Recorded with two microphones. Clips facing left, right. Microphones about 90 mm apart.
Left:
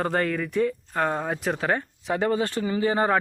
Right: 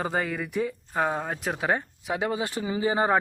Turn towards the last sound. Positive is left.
turn(degrees=-15)  # may be behind; listen again after turning